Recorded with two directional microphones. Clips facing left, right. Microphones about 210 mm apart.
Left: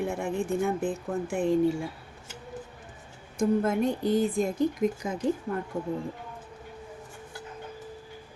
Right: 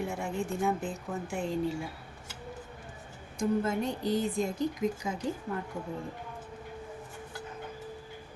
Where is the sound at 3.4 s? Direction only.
55° left (ahead or behind).